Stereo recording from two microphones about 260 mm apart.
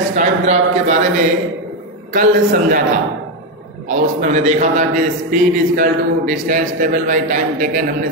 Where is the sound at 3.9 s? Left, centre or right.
Right.